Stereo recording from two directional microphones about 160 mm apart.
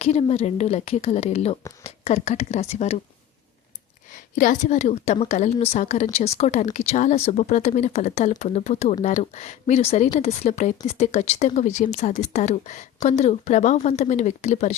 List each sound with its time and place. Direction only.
0.0 s a woman's voice: 40° left (ahead or behind)
4.4 s a woman's voice: 50° left (ahead or behind)